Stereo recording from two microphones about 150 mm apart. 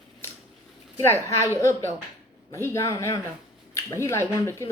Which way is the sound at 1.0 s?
15° left (ahead or behind).